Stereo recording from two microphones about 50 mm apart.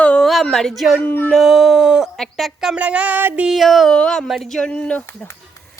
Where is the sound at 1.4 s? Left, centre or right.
Centre.